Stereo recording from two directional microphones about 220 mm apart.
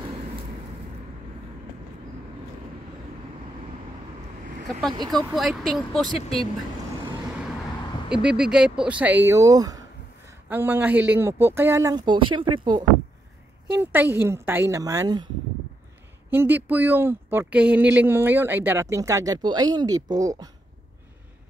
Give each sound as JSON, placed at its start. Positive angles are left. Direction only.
{"t": 5.2, "sound": "speech", "side_deg": 0}
{"t": 8.1, "sound": "speech", "side_deg": -5}
{"t": 13.7, "sound": "speech", "side_deg": -10}
{"t": 16.3, "sound": "speech", "side_deg": -10}